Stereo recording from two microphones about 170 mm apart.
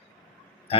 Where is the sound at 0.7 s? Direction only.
35° left (ahead or behind).